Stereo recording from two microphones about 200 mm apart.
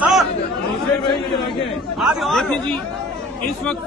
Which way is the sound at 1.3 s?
25° left (ahead or behind).